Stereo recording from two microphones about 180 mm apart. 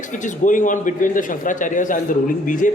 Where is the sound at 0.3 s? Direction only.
45° left (ahead or behind).